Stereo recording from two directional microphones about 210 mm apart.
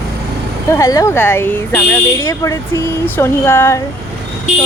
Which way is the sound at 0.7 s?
15° left (ahead or behind).